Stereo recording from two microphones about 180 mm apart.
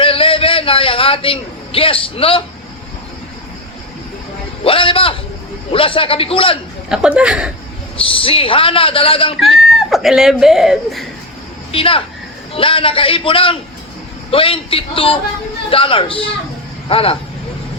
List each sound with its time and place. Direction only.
0.0 s a sound: 30° left (ahead or behind)
4.6 s a man's voice: 30° left (ahead or behind)
6.9 s speech: 5° right (ahead or behind)
7.9 s a man's voice: 30° left (ahead or behind)
9.7 s speech: centre (ahead or behind)
11.7 s a man's voice: 30° left (ahead or behind)